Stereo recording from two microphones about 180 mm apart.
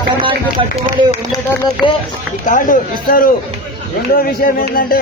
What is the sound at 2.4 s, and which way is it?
Speech, 45° left (ahead or behind).